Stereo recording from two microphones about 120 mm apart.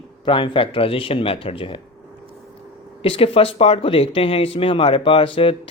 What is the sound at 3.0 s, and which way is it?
Speech, 50° left (ahead or behind).